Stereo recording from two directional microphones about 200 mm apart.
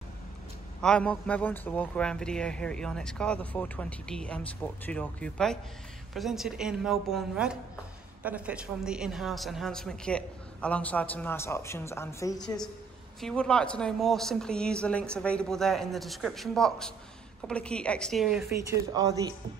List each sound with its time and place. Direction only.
0.7 s a man's voice: 5° left (ahead or behind)
13.2 s a man's voice: 5° left (ahead or behind)
18.5 s a woman's voice: 15° right (ahead or behind)